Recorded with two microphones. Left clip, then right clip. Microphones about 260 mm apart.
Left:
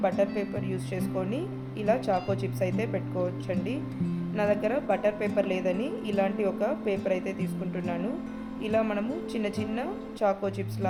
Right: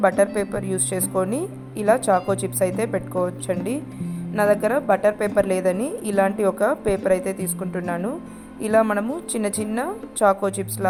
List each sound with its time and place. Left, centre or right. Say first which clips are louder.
0.2 s a woman's voice: right 8 dB; right